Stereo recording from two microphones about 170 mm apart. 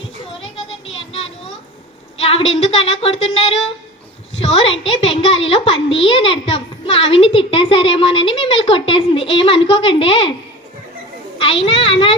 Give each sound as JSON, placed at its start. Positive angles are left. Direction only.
{"t": 0.0, "sound": "child singing", "side_deg": 35}
{"t": 2.1, "sound": "a child's voice", "side_deg": 35}
{"t": 11.3, "sound": "a child's voice", "side_deg": 35}